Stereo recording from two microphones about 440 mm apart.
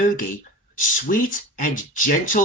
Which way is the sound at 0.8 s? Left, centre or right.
Centre.